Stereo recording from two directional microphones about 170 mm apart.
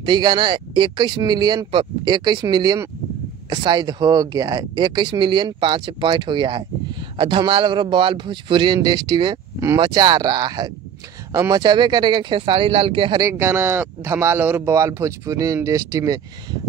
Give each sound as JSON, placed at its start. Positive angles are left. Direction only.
{"t": 0.0, "sound": "speech", "side_deg": -25}
{"t": 13.2, "sound": "speech", "side_deg": -15}